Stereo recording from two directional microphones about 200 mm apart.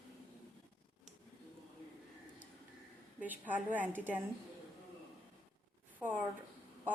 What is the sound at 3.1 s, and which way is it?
A woman's voice, 10° right (ahead or behind).